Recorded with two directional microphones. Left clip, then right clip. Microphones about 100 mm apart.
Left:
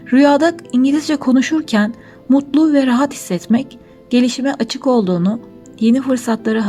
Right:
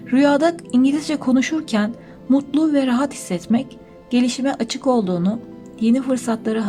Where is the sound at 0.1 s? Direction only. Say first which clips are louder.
Left 4 dB; 40° left (ahead or behind).